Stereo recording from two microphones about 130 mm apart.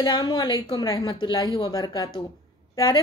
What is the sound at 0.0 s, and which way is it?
A woman's voice, 35° left (ahead or behind).